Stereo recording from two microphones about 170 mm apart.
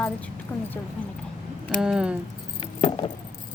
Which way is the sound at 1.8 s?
5° right (ahead or behind).